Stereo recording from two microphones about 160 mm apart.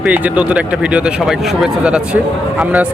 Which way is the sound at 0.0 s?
10° right (ahead or behind).